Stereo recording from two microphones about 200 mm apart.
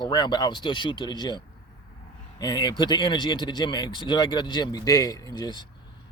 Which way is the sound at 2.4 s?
20° left (ahead or behind).